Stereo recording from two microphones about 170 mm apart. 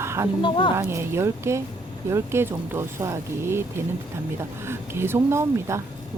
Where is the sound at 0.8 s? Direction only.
15° right (ahead or behind).